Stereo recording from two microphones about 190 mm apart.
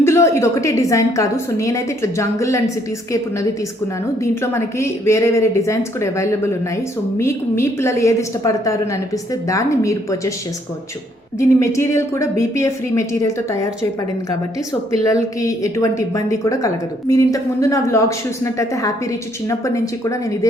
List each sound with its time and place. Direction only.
0.0 s a woman's voice: 15° left (ahead or behind)
4.2 s a woman's voice: 15° left (ahead or behind)
11.3 s a woman's voice: 15° left (ahead or behind)
15.0 s a woman's voice: 15° left (ahead or behind)